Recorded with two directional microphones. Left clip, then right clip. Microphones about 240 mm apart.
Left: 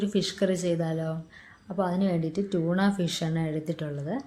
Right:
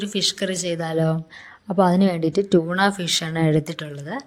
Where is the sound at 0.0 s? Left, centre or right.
Right.